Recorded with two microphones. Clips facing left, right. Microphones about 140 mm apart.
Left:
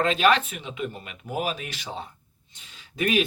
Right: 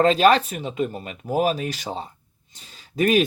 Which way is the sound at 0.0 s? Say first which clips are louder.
Right 5 dB; 35° right (ahead or behind).